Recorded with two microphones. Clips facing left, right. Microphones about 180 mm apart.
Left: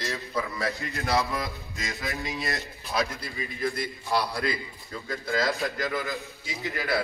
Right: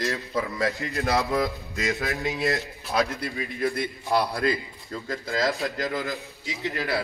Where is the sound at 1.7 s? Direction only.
65° right (ahead or behind).